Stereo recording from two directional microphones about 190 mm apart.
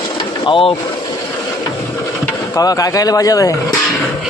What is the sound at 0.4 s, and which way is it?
Speech, 30° left (ahead or behind).